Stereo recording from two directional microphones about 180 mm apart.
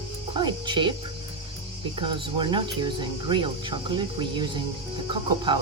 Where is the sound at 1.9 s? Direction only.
25° right (ahead or behind).